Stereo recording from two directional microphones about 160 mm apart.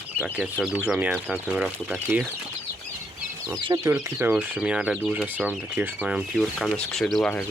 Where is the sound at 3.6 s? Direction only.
25° right (ahead or behind).